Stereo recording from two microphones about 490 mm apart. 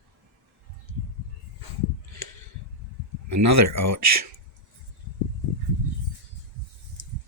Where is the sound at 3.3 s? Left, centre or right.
Right.